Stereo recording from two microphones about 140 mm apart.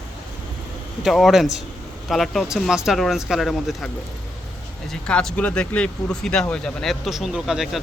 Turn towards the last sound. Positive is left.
turn(degrees=0)  # may be behind; listen again after turning